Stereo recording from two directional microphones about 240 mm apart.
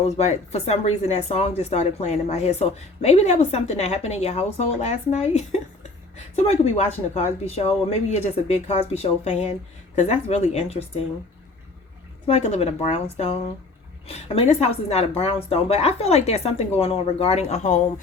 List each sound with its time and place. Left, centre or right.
0.2 s speech: left
12.2 s speech: left